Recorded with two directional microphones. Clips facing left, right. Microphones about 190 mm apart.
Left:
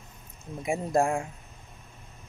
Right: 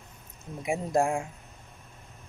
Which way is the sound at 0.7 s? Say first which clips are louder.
Left 1 dB; 10° right (ahead or behind).